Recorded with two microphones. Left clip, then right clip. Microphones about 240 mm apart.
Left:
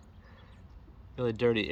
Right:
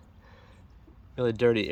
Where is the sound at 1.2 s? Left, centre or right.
Right.